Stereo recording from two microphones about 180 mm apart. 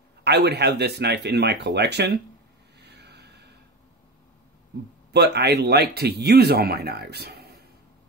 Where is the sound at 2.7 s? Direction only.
65° right (ahead or behind).